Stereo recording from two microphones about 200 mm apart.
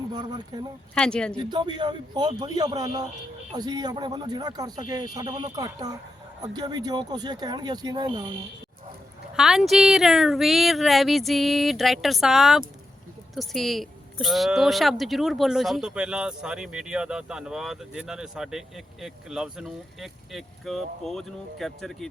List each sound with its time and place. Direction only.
0.1 s speech: 20° right (ahead or behind)
0.9 s speech: 5° left (ahead or behind)
1.4 s speech: 25° right (ahead or behind)
9.3 s speech: centre (ahead or behind)